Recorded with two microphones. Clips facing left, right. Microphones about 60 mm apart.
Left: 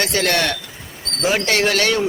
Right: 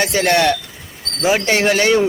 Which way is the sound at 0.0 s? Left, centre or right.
Centre.